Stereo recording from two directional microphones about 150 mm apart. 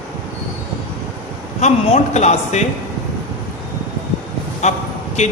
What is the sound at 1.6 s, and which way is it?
Speech, 50° left (ahead or behind).